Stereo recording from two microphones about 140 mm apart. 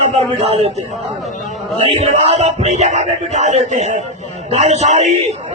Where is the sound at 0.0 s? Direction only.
50° right (ahead or behind).